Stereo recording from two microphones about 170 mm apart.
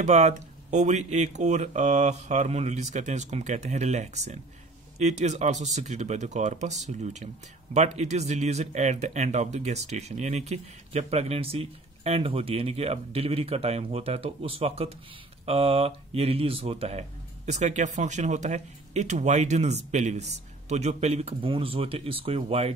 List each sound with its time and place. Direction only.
0.0 s speech: 40° right (ahead or behind)